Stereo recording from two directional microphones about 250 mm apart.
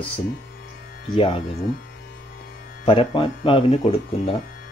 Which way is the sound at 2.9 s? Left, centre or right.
Left.